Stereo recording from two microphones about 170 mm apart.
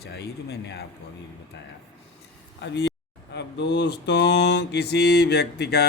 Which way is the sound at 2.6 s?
85° left.